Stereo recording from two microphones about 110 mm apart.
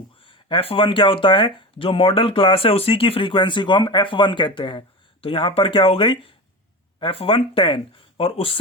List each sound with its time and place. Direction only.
0.3 s speech: 50° left (ahead or behind)